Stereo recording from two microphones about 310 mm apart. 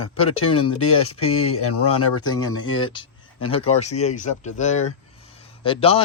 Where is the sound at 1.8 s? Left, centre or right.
Centre.